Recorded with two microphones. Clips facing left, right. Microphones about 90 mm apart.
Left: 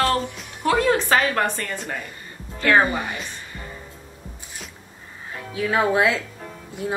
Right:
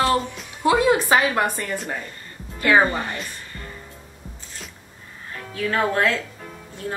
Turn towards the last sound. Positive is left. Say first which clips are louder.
# left 3 dB
turn(degrees=10)  # may be behind; listen again after turning